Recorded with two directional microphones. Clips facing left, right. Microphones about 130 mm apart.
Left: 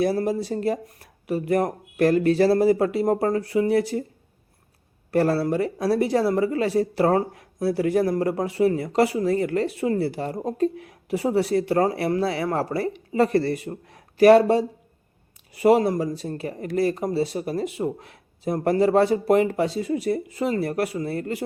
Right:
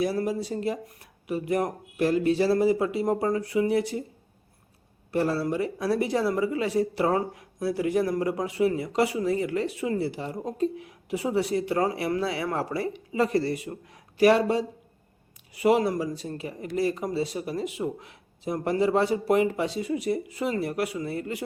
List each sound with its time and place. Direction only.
0.0 s speech: 35° left (ahead or behind)
2.0 s speech: 60° left (ahead or behind); by 4.0 s 40° left (ahead or behind)
5.1 s speech: 65° left (ahead or behind)
5.4 s speech: 40° left (ahead or behind)